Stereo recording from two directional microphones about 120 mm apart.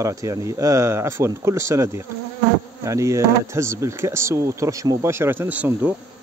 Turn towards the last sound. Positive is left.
turn(degrees=-15)  # may be behind; listen again after turning